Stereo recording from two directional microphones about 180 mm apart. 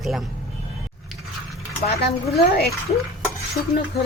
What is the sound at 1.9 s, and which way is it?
Speech, 60° left (ahead or behind).